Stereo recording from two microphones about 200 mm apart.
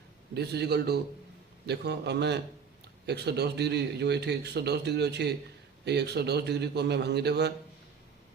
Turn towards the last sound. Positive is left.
turn(degrees=-55)  # may be behind; listen again after turning